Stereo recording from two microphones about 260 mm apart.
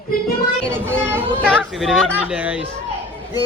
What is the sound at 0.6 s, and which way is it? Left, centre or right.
Speech, centre.